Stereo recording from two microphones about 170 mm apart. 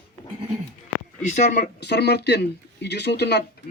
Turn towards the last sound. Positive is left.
turn(degrees=75)  # may be behind; listen again after turning